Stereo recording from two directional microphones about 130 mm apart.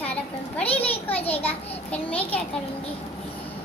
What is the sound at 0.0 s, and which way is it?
Children playing, 10° left (ahead or behind).